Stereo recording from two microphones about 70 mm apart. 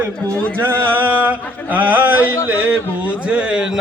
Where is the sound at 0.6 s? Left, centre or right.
Right.